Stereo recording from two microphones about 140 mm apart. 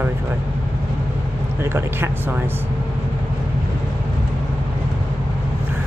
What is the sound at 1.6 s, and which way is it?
Speech, 15° right (ahead or behind).